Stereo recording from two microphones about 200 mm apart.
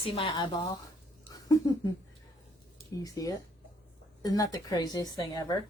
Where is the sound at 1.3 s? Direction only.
15° left (ahead or behind).